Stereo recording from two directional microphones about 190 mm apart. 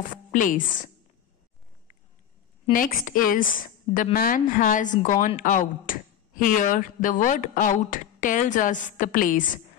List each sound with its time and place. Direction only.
0.0 s a woman's voice: 45° left (ahead or behind)
2.7 s speech: 45° left (ahead or behind)